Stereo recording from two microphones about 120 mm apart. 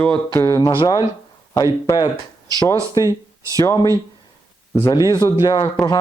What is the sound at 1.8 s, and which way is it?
Speech, 30° left (ahead or behind).